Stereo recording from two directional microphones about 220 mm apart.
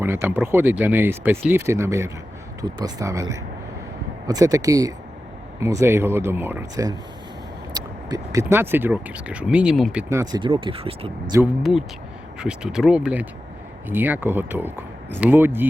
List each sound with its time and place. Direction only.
0.0 s speech: 10° right (ahead or behind)
11.7 s speech: centre (ahead or behind)